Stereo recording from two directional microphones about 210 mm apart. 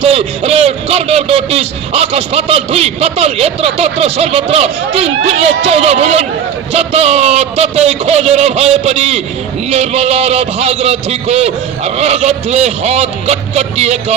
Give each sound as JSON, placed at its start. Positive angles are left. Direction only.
{"t": 0.0, "sound": "a man's voice", "side_deg": -30}